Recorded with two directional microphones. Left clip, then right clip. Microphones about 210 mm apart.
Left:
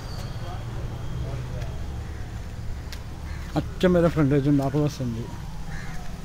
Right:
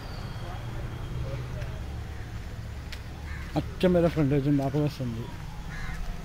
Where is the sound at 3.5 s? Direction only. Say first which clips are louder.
Left 3 dB; 5° right (ahead or behind).